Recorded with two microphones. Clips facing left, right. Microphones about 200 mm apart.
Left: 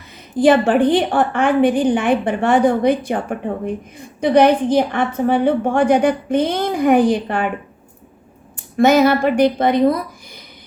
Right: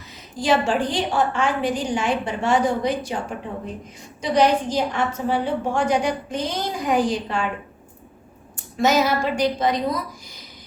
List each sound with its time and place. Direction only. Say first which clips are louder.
0.3 s a woman's voice: left 8 dB; 55° left (ahead or behind)
8.8 s a woman's voice: left 7 dB; 55° left (ahead or behind)